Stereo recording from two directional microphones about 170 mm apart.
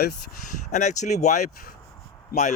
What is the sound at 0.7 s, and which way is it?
Speech, 45° left (ahead or behind).